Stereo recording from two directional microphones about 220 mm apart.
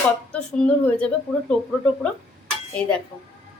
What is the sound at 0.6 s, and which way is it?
Speech, 5° left (ahead or behind).